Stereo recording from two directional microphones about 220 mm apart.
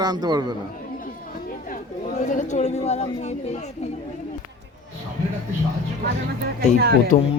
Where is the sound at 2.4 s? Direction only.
35° left (ahead or behind).